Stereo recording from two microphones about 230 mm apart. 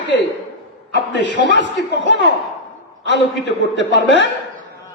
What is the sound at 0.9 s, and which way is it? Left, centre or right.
A man's voice, left.